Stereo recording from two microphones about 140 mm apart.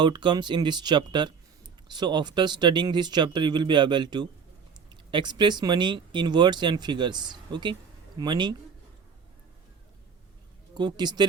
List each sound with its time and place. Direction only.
0.0 s speech: 35° right (ahead or behind)
10.8 s speech: 30° right (ahead or behind)